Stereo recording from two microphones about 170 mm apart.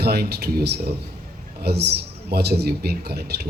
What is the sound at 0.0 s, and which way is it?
Speech, 70° right (ahead or behind).